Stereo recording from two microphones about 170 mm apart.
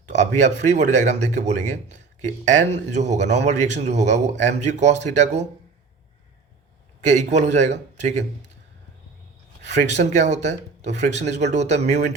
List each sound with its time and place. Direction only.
0.1 s speech: 45° right (ahead or behind)
7.0 s speech: 45° right (ahead or behind)
9.6 s speech: 45° right (ahead or behind)